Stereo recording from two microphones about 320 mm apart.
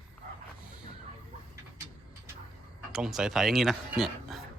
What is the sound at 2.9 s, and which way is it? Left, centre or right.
Speech, centre.